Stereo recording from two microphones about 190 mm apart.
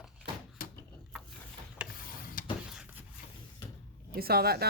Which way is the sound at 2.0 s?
50° left (ahead or behind).